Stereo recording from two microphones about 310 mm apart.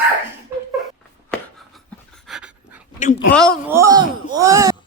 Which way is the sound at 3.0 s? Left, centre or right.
Left.